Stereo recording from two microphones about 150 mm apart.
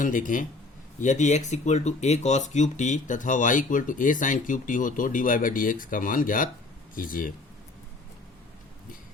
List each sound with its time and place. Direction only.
0.0 s speech: 60° left (ahead or behind)